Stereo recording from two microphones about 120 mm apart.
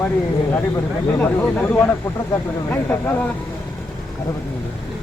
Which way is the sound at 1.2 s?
15° left (ahead or behind).